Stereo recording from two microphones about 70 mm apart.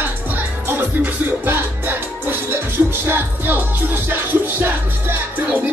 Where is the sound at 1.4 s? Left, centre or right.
Right.